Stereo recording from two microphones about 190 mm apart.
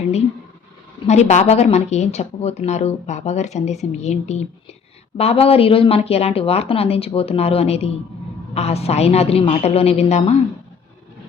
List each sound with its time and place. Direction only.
1.0 s speech: 35° left (ahead or behind)